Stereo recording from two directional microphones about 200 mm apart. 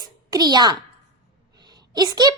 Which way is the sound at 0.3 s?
20° right (ahead or behind).